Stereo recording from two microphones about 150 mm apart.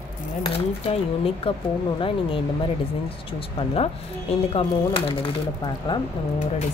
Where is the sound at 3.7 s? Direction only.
40° left (ahead or behind).